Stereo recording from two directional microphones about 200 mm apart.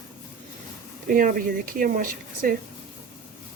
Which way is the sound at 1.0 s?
45° right (ahead or behind).